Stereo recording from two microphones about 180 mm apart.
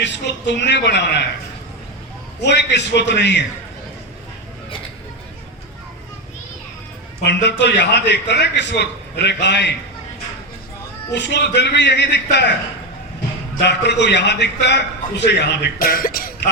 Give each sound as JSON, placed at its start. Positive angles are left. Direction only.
{"t": 0.0, "sound": "a man's voice", "side_deg": 75}
{"t": 2.4, "sound": "a man's voice", "side_deg": 75}
{"t": 7.3, "sound": "a man's voice", "side_deg": 75}
{"t": 11.1, "sound": "a man's voice", "side_deg": 75}
{"t": 13.7, "sound": "a man's voice", "side_deg": 75}